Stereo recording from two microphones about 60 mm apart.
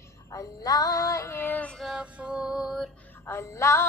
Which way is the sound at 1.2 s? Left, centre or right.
Left.